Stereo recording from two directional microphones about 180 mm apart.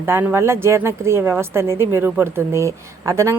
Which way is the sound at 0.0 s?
10° right (ahead or behind).